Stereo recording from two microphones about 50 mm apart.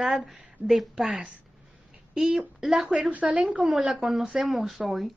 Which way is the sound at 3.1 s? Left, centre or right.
Right.